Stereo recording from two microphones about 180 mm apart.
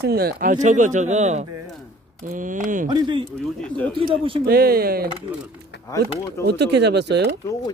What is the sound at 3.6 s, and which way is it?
Speech, 5° left (ahead or behind).